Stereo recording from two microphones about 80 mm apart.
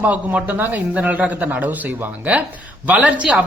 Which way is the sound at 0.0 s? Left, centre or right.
Right.